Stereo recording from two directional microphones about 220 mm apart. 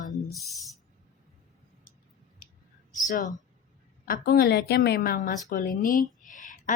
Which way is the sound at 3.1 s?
35° left (ahead or behind).